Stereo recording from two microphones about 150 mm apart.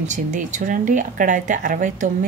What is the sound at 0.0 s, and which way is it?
A woman's voice, 55° right (ahead or behind).